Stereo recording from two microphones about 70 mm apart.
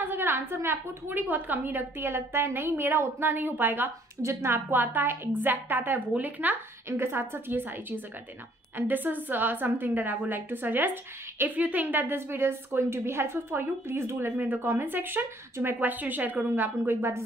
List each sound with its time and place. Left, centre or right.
0.0 s a woman's voice: right
4.2 s a woman's voice: right
6.9 s a woman's voice: right